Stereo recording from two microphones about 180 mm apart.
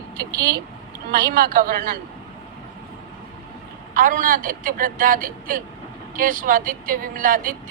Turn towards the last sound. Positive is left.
turn(degrees=-50)  # may be behind; listen again after turning